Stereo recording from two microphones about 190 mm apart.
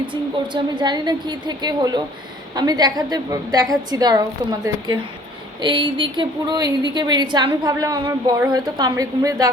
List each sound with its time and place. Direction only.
0.0 s a woman's voice: 25° right (ahead or behind)
5.5 s a woman's voice: 25° right (ahead or behind)